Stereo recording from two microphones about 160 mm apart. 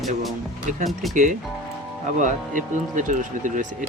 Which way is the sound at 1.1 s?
50° right (ahead or behind).